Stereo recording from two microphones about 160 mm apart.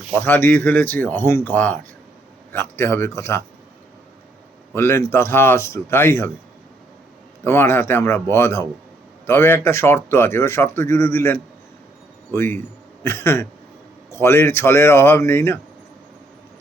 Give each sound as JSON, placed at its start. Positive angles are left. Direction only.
{"t": 0.1, "sound": "speech", "side_deg": 10}
{"t": 4.7, "sound": "speech", "side_deg": 15}
{"t": 7.4, "sound": "a man's voice", "side_deg": 15}